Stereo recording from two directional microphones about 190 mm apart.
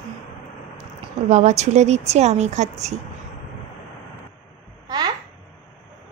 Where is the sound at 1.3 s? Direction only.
35° right (ahead or behind).